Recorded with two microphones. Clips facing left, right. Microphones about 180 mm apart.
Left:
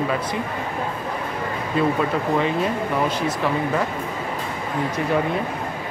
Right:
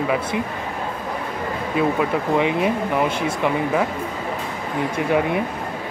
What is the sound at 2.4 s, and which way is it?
Speech, 15° right (ahead or behind).